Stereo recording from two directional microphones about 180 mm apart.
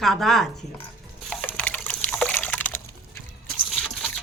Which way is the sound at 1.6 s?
10° left (ahead or behind).